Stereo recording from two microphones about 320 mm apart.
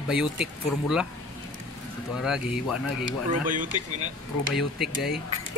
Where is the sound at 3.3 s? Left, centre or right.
Right.